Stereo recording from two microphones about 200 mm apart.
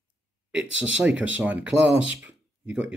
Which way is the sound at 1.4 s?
5° right (ahead or behind).